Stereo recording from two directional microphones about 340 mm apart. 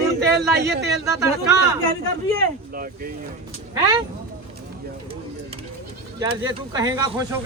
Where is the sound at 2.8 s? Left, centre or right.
Right.